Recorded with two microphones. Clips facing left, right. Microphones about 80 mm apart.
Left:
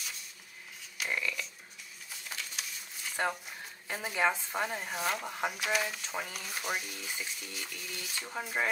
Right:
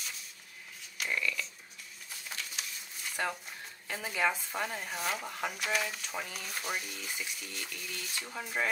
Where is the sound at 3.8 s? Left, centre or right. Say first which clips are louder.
Left 1 dB; centre.